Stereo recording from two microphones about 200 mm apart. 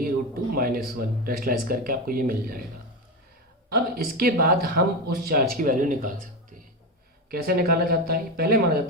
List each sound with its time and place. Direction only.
0.5 s speech: 45° right (ahead or behind)
3.7 s speech: 50° right (ahead or behind)
7.3 s speech: 50° right (ahead or behind)